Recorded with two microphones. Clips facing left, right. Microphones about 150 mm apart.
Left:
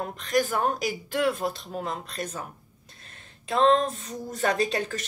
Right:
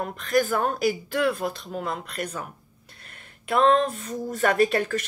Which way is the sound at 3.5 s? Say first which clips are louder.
Right 1 dB; 25° left (ahead or behind).